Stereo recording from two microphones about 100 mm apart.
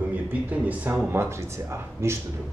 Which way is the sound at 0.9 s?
20° right (ahead or behind).